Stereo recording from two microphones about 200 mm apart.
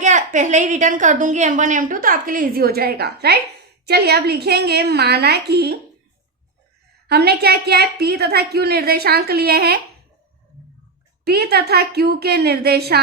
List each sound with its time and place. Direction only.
0.0 s a woman's voice: 35° right (ahead or behind); by 5.7 s 55° right (ahead or behind)
7.1 s a woman's voice: 55° right (ahead or behind)
11.3 s a woman's voice: 55° right (ahead or behind)